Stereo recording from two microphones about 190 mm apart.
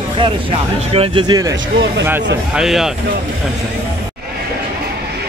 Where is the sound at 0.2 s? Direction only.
30° right (ahead or behind).